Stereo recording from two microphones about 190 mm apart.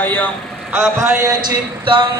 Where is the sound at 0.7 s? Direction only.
15° right (ahead or behind).